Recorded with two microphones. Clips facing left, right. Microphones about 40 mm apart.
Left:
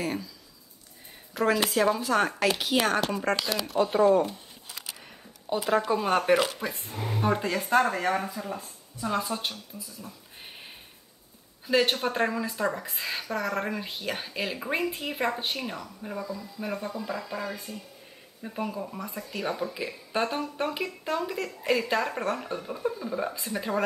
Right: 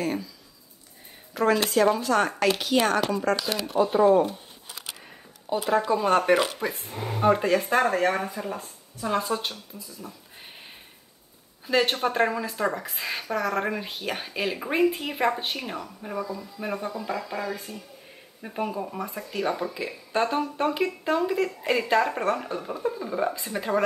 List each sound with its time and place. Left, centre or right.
0.0 s speech: centre
1.3 s speech: centre
3.1 s speech: left
3.7 s speech: right
4.0 s speech: right
5.9 s speech: centre
6.9 s speech: right
9.3 s speech: centre
11.6 s a woman's voice: centre
19.7 s speech: centre